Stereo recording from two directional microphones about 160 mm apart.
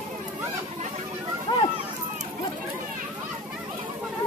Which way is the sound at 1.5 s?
30° left (ahead or behind).